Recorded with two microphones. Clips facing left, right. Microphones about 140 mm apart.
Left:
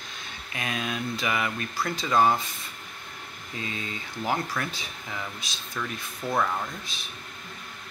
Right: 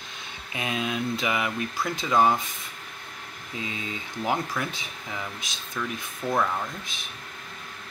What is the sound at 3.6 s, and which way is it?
Speech, 15° right (ahead or behind).